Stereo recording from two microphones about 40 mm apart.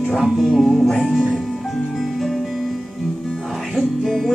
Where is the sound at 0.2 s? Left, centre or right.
Centre.